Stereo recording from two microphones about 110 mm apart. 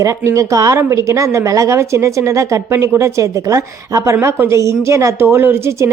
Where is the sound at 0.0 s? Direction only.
30° right (ahead or behind).